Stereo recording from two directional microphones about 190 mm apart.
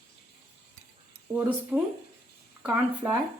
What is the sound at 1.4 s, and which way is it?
Speech, 10° right (ahead or behind).